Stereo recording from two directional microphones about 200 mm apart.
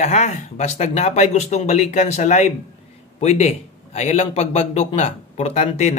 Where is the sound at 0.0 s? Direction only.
35° left (ahead or behind).